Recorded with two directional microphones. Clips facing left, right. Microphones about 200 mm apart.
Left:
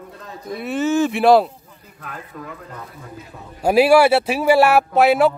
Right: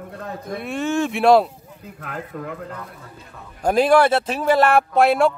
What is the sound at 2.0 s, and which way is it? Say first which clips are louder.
Speech: right 3 dB; 60° right (ahead or behind).